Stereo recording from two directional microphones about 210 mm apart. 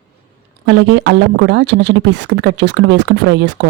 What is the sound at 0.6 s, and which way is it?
Speech, 55° right (ahead or behind).